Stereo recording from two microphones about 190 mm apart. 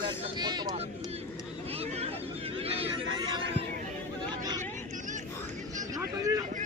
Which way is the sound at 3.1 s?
25° right (ahead or behind).